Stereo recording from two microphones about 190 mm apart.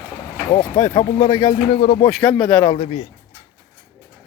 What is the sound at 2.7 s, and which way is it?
Speech, 30° left (ahead or behind).